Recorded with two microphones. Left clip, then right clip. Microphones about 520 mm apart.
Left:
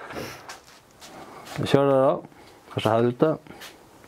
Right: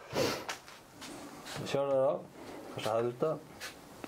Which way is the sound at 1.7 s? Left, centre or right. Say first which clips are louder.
Left 10 dB; left.